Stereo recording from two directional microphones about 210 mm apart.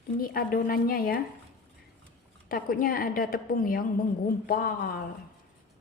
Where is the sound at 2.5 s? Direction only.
40° left (ahead or behind).